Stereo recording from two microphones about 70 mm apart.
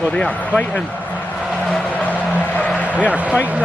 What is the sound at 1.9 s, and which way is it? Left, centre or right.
Vehicle, left.